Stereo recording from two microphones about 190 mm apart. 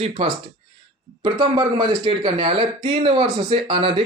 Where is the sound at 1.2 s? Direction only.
25° right (ahead or behind).